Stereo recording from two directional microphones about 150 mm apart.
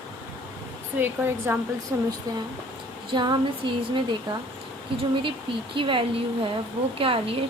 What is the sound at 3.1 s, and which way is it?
Speech, 30° right (ahead or behind).